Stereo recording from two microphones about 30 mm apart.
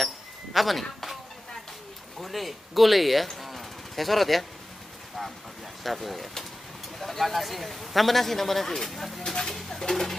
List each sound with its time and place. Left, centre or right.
0.0 s a sound: centre
2.1 s a man's voice: centre
3.3 s a sound: centre
5.9 s a man's voice: centre
9.2 s speech: centre
9.7 s percussion: centre